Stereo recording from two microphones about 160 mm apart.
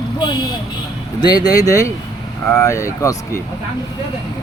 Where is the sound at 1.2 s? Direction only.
25° left (ahead or behind).